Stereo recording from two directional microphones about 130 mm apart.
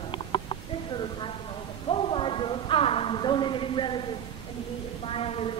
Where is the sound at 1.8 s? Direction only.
45° left (ahead or behind).